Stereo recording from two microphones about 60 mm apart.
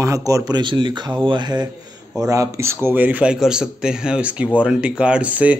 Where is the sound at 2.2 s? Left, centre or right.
Right.